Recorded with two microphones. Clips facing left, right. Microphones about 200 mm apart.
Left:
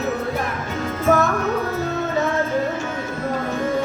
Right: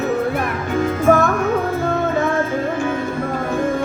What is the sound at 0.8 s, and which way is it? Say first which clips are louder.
Music: right 4 dB; 50° right (ahead or behind).